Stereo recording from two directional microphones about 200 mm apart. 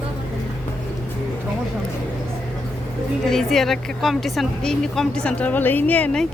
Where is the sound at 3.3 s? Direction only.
Centre (ahead or behind).